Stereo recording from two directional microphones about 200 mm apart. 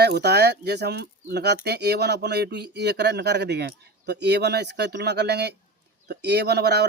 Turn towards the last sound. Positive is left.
turn(degrees=-55)  # may be behind; listen again after turning